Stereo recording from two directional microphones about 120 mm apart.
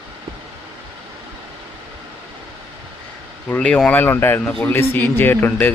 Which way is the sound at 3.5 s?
10° left (ahead or behind).